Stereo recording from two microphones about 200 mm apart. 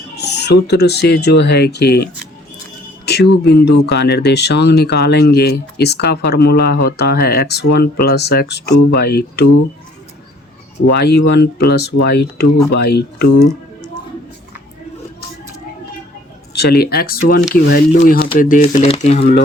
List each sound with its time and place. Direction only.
0.2 s speech: 55° left (ahead or behind)
3.1 s speech: 55° left (ahead or behind)
10.9 s speech: 55° left (ahead or behind)
16.6 s speech: 50° left (ahead or behind); by 19.4 s 35° left (ahead or behind)